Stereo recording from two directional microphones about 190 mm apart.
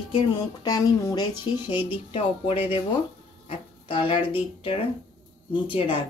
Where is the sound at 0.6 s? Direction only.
20° left (ahead or behind).